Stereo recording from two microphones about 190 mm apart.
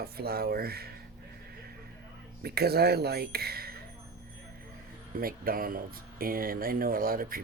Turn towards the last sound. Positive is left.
turn(degrees=-50)  # may be behind; listen again after turning